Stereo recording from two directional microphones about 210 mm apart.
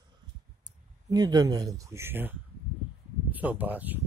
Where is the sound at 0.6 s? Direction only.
20° right (ahead or behind).